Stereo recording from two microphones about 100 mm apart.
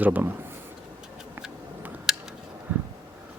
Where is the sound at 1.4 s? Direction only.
10° right (ahead or behind).